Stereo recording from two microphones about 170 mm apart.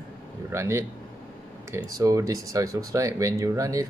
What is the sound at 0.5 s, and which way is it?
Speech, 15° right (ahead or behind).